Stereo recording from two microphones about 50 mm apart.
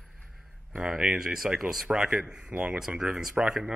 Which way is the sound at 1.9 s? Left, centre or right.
Centre.